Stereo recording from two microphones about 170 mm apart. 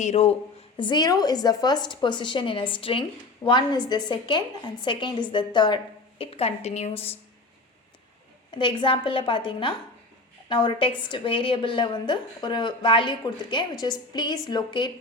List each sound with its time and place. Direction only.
0.0 s speech: 40° left (ahead or behind)
0.8 s a woman's voice: 25° left (ahead or behind)
8.5 s a woman's voice: 30° left (ahead or behind)